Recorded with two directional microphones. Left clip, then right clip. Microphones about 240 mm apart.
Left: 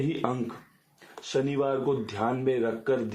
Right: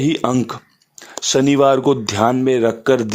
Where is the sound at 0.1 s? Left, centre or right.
Right.